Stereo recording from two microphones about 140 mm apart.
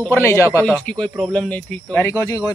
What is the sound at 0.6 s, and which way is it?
Speech, 10° left (ahead or behind).